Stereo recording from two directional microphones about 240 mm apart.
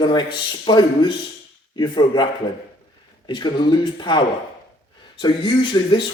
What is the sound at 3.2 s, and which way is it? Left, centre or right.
A man's voice, centre.